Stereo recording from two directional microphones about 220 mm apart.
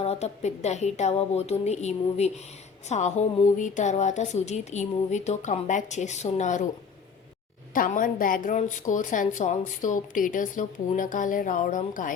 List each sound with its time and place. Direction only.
0.0 s a woman's voice: 30° left (ahead or behind)
7.7 s a woman's voice: 40° left (ahead or behind)